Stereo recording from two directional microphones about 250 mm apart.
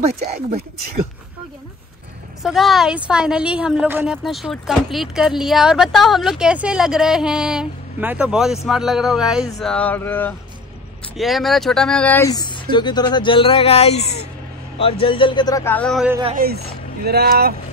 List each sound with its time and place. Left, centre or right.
2.4 s a woman's voice: centre
16.1 s speech: centre
16.3 s speech: right